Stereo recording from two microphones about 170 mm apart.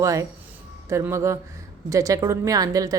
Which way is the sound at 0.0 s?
20° right (ahead or behind).